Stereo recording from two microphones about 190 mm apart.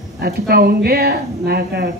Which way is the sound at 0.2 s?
55° right (ahead or behind).